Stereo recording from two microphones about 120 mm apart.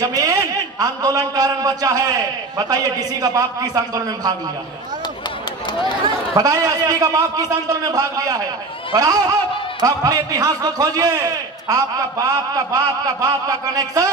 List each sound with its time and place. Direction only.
0.0 s a man's voice: 30° right (ahead or behind)
6.3 s a man's voice: 30° right (ahead or behind)